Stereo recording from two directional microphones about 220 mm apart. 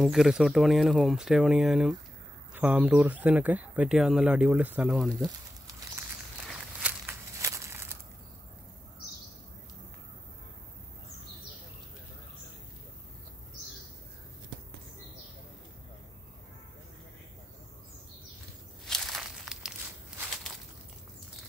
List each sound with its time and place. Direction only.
0.0 s speech: centre (ahead or behind)
5.7 s a sound: 15° right (ahead or behind)
6.4 s walk: 5° right (ahead or behind)
18.9 s crumpling: centre (ahead or behind)